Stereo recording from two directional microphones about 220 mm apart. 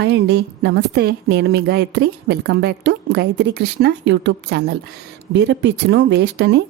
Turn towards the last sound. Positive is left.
turn(degrees=-50)  # may be behind; listen again after turning